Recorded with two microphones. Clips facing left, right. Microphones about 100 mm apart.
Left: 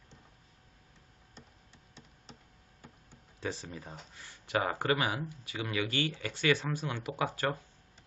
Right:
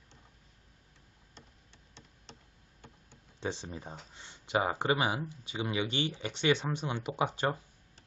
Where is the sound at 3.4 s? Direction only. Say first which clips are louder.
Right 1 dB; 25° right (ahead or behind).